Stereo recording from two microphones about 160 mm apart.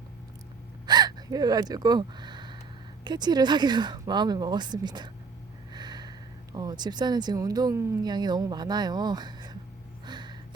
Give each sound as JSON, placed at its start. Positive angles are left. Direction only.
{"t": 0.9, "sound": "gasp", "side_deg": -25}
{"t": 3.0, "sound": "speech", "side_deg": -25}
{"t": 10.1, "sound": "a sound", "side_deg": -25}